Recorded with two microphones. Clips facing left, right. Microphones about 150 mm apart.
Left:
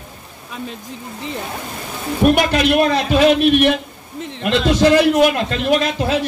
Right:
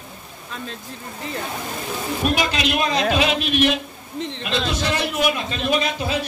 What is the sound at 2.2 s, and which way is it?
Speech, 55° left (ahead or behind).